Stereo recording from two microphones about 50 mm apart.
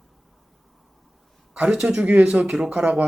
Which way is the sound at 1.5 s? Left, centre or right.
Centre.